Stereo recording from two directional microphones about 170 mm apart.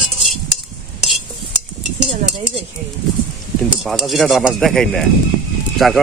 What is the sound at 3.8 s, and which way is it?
Speech, centre (ahead or behind).